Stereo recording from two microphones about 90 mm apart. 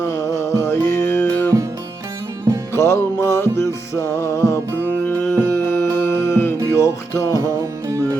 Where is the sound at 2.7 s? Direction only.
30° left (ahead or behind).